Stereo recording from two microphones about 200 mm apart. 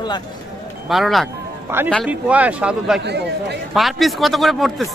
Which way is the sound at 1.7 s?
10° right (ahead or behind).